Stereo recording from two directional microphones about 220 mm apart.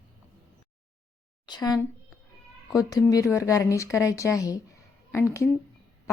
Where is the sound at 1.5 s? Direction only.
20° left (ahead or behind).